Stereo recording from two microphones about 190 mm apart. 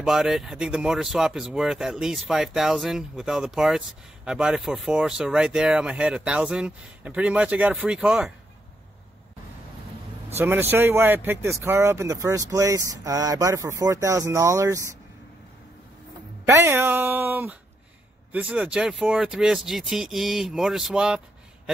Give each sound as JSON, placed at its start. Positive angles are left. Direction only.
{"t": 0.0, "sound": "speech", "side_deg": 0}
{"t": 10.3, "sound": "speech", "side_deg": -10}
{"t": 16.5, "sound": "speech", "side_deg": -15}